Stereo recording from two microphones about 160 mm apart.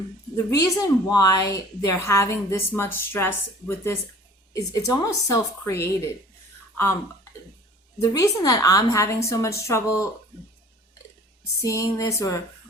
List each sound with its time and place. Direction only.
0.3 s a woman's voice: 20° left (ahead or behind)
4.5 s a woman's voice: 20° left (ahead or behind)
7.9 s a woman's voice: 20° left (ahead or behind)
11.6 s a woman's voice: 20° left (ahead or behind)